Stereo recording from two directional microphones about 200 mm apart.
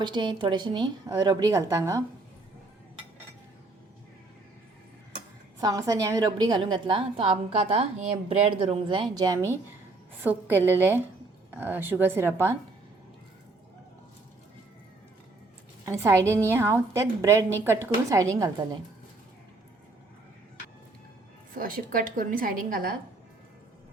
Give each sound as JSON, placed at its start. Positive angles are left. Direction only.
{"t": 0.0, "sound": "a woman's voice", "side_deg": -20}
{"t": 5.5, "sound": "a woman's voice", "side_deg": -15}
{"t": 15.9, "sound": "a woman's voice", "side_deg": -15}
{"t": 21.5, "sound": "a woman's voice", "side_deg": -45}